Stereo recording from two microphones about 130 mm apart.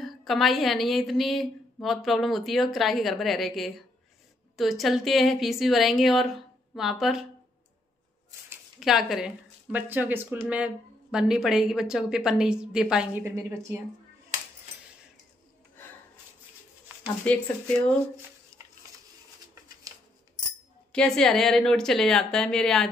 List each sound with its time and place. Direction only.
0.0 s a woman's voice: centre (ahead or behind)
8.7 s a woman's voice: 5° right (ahead or behind); by 13.7 s 20° right (ahead or behind)
17.3 s speech: 10° left (ahead or behind)
20.9 s a woman's voice: 5° left (ahead or behind)